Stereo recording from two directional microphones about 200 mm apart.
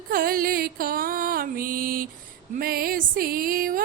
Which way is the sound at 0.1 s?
45° right (ahead or behind).